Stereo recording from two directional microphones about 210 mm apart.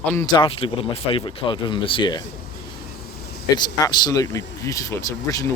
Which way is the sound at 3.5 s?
20° left (ahead or behind).